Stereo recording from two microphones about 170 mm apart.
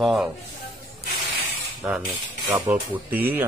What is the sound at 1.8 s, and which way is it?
A man's voice, 15° right (ahead or behind).